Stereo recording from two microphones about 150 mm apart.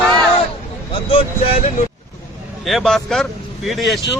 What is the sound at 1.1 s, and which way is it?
Speech, 40° left (ahead or behind).